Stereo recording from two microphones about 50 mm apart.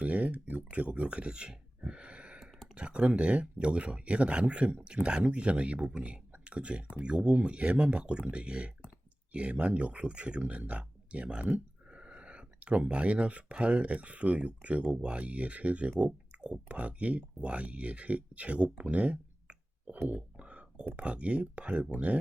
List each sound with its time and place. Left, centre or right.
0.0 s a sound: right
2.7 s speech: right
6.4 s a sound: right
6.9 s speech: right
20.1 s whispering: right
20.9 s speech: right